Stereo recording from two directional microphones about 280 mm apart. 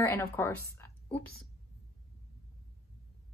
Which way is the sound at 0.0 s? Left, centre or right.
Centre.